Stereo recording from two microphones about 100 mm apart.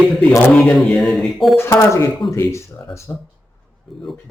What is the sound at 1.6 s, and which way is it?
Speech, 25° left (ahead or behind).